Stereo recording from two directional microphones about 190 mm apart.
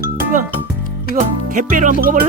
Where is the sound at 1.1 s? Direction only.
45° right (ahead or behind).